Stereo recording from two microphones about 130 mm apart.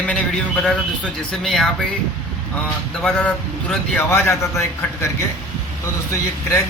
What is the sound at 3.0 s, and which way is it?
A man's voice, 5° left (ahead or behind).